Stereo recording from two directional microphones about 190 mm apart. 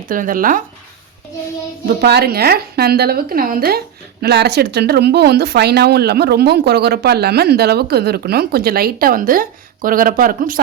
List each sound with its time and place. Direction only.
0.1 s speech: 45° right (ahead or behind)
2.0 s speech: 55° right (ahead or behind)